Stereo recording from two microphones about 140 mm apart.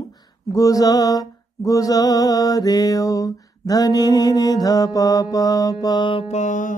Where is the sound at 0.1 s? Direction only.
25° left (ahead or behind).